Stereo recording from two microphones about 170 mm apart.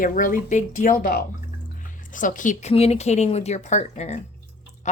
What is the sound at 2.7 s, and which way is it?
A woman's voice, 35° left (ahead or behind).